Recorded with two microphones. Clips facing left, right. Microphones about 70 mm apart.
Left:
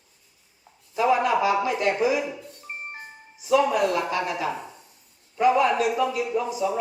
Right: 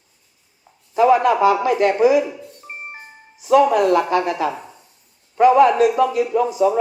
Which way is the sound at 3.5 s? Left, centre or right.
Right.